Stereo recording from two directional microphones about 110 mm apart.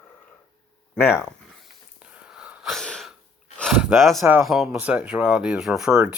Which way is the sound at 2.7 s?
5° left (ahead or behind).